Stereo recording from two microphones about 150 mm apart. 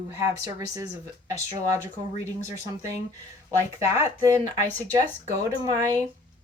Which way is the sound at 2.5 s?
20° right (ahead or behind).